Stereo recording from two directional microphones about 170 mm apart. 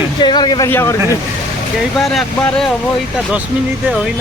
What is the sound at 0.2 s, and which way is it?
Speech, 25° left (ahead or behind).